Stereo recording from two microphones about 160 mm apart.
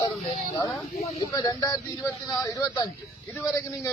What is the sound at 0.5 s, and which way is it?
A man's voice, 20° left (ahead or behind).